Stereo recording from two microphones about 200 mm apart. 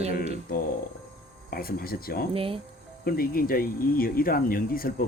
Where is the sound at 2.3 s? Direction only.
25° right (ahead or behind).